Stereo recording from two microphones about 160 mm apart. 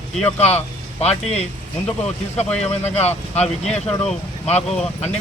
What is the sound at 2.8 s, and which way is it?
Speech, 40° left (ahead or behind).